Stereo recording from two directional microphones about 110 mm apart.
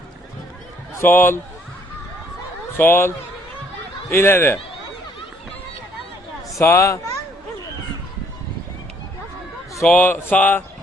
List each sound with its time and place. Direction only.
0.9 s a man's voice: 20° left (ahead or behind)
2.7 s speech: 20° left (ahead or behind)
4.1 s speech: 20° left (ahead or behind)
6.6 s speech: 25° left (ahead or behind)
9.8 s speech: 15° left (ahead or behind)